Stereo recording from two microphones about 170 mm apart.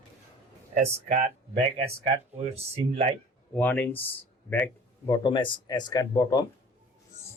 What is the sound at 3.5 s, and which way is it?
Speech, 10° left (ahead or behind).